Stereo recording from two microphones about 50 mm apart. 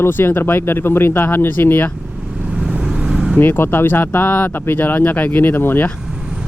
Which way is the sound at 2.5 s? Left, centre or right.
Centre.